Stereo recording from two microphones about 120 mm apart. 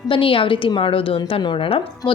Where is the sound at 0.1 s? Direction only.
45° left (ahead or behind).